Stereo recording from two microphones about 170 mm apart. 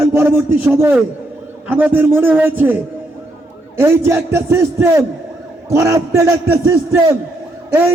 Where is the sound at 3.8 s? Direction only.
15° right (ahead or behind).